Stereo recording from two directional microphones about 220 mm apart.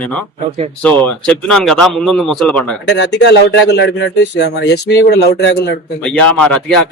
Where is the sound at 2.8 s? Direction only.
50° left (ahead or behind).